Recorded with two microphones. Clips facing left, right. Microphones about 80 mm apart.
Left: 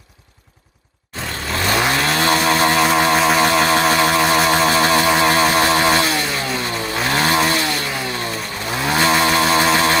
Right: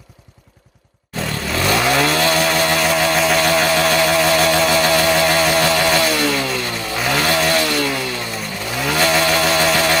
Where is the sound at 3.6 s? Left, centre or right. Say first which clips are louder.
Even; left.